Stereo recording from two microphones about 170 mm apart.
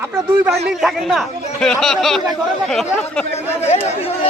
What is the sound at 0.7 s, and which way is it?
Speech, centre (ahead or behind).